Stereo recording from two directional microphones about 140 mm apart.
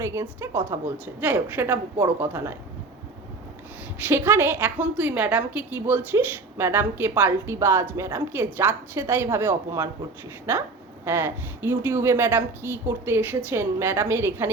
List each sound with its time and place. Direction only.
0.0 s a woman's voice: 20° right (ahead or behind)
3.9 s a woman's voice: 15° right (ahead or behind)
11.0 s a woman's voice: 15° right (ahead or behind)